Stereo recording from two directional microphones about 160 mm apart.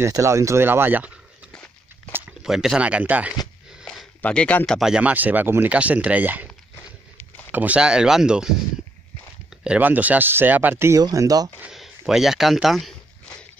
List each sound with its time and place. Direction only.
0.0 s speech: 20° right (ahead or behind)
1.5 s walk: 5° left (ahead or behind)
2.1 s speech: 5° right (ahead or behind)
3.8 s speech: centre (ahead or behind)
7.5 s speech: 10° right (ahead or behind)
9.6 s speech: 10° right (ahead or behind); by 11.5 s 25° right (ahead or behind)
11.6 s a sound: centre (ahead or behind)